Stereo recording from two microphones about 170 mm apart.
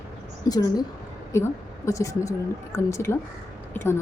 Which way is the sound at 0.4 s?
20° left (ahead or behind).